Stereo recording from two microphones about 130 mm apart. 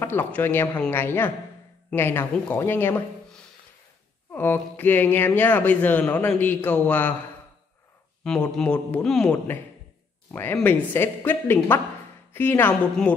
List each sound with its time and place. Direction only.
0.0 s speech: 15° left (ahead or behind)
4.3 s speech: 15° left (ahead or behind)
8.2 s a man's voice: 5° left (ahead or behind)
10.3 s a woman's voice: 15° left (ahead or behind)